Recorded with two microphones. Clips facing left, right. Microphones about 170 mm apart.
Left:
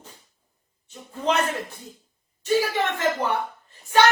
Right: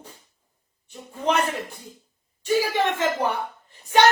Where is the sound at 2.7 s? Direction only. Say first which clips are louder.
Right 1 dB; 15° right (ahead or behind).